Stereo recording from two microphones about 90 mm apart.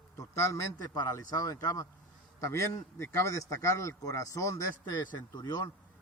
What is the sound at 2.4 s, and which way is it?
A man's voice, 30° left (ahead or behind).